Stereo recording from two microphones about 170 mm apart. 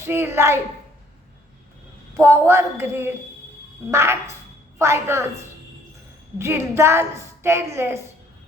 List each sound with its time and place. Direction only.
0.0 s a woman's voice: 15° right (ahead or behind)
2.1 s a woman's voice: 15° right (ahead or behind)
6.4 s a woman's voice: 15° right (ahead or behind)